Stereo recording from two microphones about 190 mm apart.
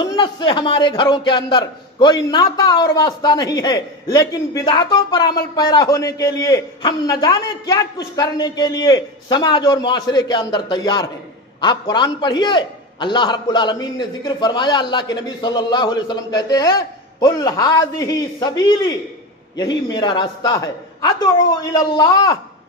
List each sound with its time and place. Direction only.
0.0 s a man's voice: 25° left (ahead or behind)